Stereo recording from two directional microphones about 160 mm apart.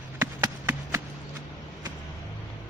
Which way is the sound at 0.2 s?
15° right (ahead or behind).